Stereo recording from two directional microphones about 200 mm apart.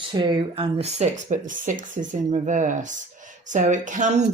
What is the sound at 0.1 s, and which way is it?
Speech, 20° right (ahead or behind).